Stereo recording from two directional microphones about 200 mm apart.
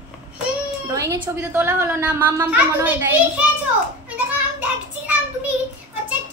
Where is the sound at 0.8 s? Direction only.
20° right (ahead or behind).